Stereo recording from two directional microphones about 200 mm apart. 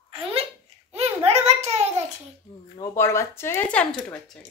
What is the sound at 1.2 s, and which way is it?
Speech, 30° right (ahead or behind).